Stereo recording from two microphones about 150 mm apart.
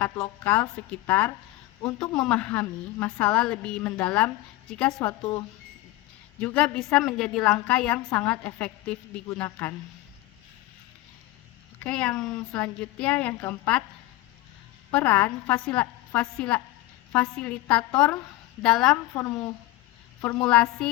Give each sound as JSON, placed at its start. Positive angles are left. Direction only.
{"t": 0.0, "sound": "a woman's voice", "side_deg": 5}
{"t": 5.2, "sound": "speech", "side_deg": 30}
{"t": 6.4, "sound": "a woman's voice", "side_deg": 5}
{"t": 11.8, "sound": "a woman's voice", "side_deg": 5}
{"t": 14.8, "sound": "a woman's voice", "side_deg": 10}
{"t": 19.1, "sound": "speech", "side_deg": 20}
{"t": 20.4, "sound": "a woman's voice", "side_deg": 5}